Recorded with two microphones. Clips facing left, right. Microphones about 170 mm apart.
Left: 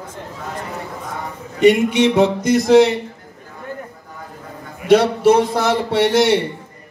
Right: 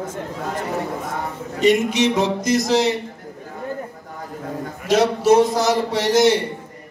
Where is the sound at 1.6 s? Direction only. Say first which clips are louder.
Left 4 dB; 60° left (ahead or behind).